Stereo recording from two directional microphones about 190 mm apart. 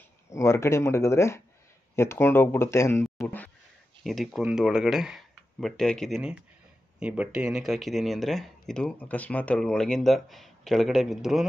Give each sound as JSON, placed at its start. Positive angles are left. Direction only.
{"t": 0.3, "sound": "speech", "side_deg": 15}